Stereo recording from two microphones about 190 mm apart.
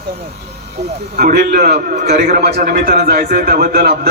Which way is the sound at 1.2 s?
50° right (ahead or behind).